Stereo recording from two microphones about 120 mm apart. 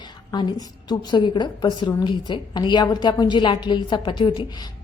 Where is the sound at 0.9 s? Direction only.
40° left (ahead or behind).